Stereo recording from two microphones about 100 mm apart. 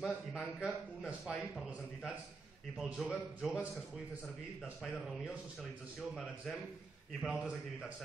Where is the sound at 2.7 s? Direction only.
5° right (ahead or behind).